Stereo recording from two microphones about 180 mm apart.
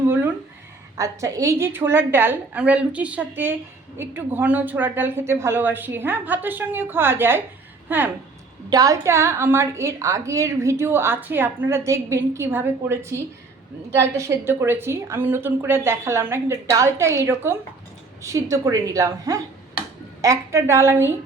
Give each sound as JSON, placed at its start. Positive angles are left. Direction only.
{"t": 0.9, "sound": "a woman's voice", "side_deg": -15}